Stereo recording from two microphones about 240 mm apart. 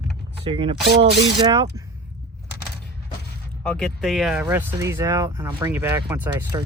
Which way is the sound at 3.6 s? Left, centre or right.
Centre.